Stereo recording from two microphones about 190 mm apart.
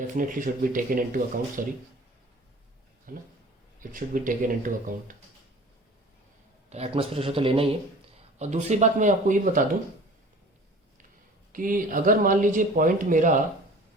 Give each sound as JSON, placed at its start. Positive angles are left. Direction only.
{"t": 0.1, "sound": "speech", "side_deg": -45}
{"t": 3.1, "sound": "speech", "side_deg": -45}
{"t": 6.7, "sound": "a man's voice", "side_deg": -30}
{"t": 11.5, "sound": "speech", "side_deg": -45}